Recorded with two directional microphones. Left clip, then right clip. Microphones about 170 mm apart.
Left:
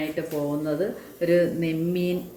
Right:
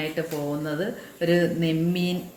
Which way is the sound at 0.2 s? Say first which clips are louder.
Left 1 dB; 50° right (ahead or behind).